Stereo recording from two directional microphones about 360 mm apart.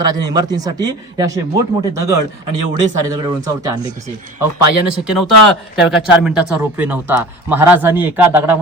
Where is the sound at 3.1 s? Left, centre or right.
Centre.